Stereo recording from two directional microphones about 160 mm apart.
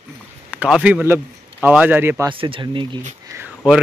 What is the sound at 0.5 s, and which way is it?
A man's voice, 5° right (ahead or behind).